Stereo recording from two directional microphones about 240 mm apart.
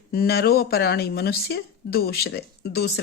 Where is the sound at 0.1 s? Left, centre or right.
Left.